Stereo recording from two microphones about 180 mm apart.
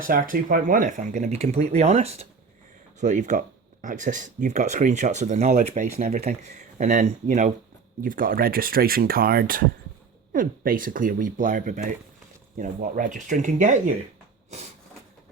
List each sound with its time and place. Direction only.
0.0 s speech: 50° right (ahead or behind)